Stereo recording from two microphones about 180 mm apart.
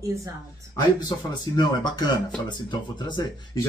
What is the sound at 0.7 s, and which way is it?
Speech, 25° left (ahead or behind).